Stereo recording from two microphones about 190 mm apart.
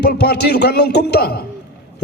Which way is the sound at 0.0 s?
55° left (ahead or behind).